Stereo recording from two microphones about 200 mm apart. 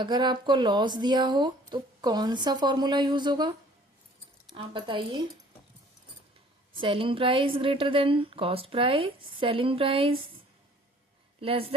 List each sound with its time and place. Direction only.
0.0 s speech: 20° right (ahead or behind)
6.7 s speech: 25° right (ahead or behind)
11.3 s speech: 30° right (ahead or behind)